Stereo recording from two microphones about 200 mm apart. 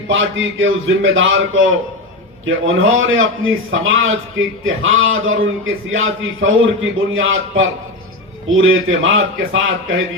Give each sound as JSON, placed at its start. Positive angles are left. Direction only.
{"t": 0.1, "sound": "a man's voice", "side_deg": -75}
{"t": 2.5, "sound": "a man's voice", "side_deg": -85}